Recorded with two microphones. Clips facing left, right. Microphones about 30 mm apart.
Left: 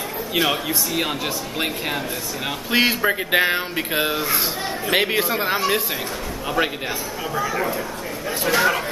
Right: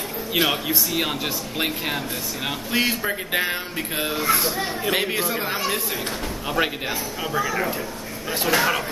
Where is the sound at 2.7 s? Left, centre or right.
Left.